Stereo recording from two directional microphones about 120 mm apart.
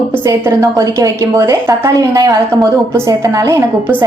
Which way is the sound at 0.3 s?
25° right (ahead or behind).